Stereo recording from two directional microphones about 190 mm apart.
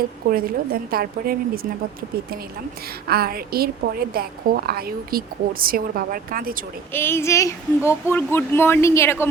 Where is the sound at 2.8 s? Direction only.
55° right (ahead or behind).